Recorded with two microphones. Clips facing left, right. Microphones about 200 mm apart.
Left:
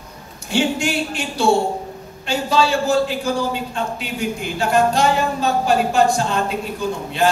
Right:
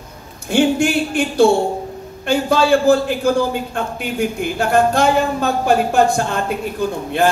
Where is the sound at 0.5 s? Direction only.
55° right (ahead or behind).